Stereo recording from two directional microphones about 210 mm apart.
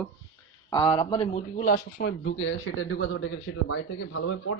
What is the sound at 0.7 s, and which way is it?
Speech, 20° left (ahead or behind).